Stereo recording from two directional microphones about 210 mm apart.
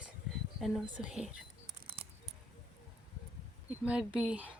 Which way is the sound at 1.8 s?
25° right (ahead or behind).